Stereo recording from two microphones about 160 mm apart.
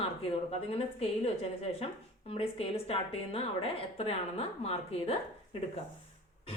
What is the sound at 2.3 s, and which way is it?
A woman's voice, 35° left (ahead or behind).